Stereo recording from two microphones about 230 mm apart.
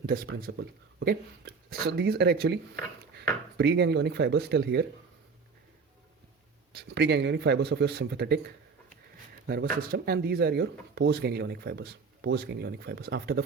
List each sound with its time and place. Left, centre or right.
0.0 s speech: right
3.6 s speech: right
6.7 s speech: right